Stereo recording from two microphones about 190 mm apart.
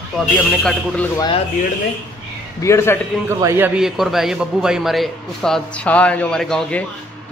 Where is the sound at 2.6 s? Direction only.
15° left (ahead or behind).